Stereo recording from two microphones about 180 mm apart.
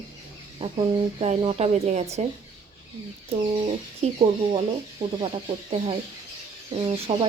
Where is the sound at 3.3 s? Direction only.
30° right (ahead or behind).